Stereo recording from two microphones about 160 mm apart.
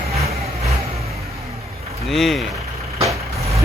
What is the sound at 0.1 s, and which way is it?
Vehicle, 40° right (ahead or behind).